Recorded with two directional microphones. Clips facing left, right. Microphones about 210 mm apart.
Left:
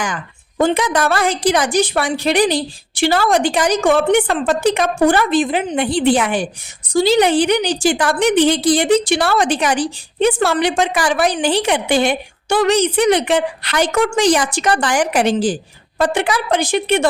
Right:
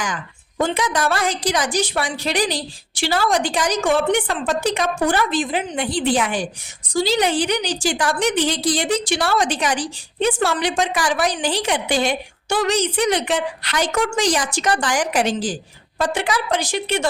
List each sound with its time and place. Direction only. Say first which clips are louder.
0.6 s a woman's voice: left 5 dB; 60° left (ahead or behind)